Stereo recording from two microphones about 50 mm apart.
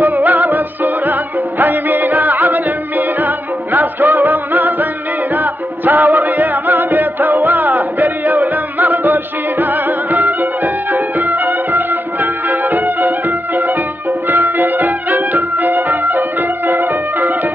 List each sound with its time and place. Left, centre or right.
0.0 s music: right
14.3 s music: right